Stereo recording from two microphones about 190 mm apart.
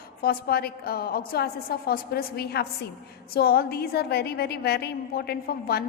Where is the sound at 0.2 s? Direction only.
55° left (ahead or behind).